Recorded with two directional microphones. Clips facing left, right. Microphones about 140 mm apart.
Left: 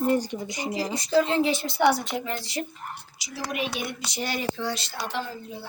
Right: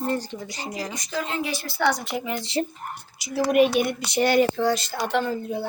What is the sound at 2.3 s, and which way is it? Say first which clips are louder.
Speech: right 6 dB; 25° right (ahead or behind).